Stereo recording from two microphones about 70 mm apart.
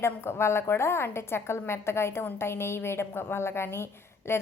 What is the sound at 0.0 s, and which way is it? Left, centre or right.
A woman's voice, left.